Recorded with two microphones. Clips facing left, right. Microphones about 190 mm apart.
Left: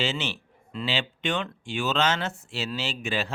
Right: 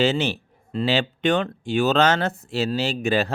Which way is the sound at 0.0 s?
40° right (ahead or behind).